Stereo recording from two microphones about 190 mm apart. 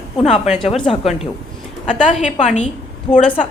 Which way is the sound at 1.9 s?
40° left (ahead or behind).